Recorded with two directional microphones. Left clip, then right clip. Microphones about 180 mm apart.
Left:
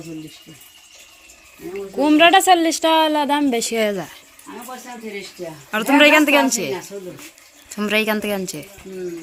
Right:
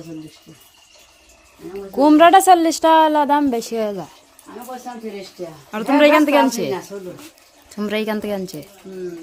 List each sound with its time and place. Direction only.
2.0 s speech: 30° right (ahead or behind); by 4.1 s centre (ahead or behind)
5.7 s a woman's voice: 10° right (ahead or behind)